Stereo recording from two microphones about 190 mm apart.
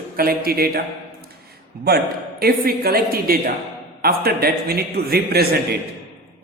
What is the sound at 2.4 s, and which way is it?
A man's voice, 55° right (ahead or behind).